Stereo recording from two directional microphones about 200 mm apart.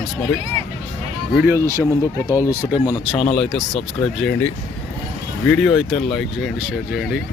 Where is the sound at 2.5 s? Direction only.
10° right (ahead or behind).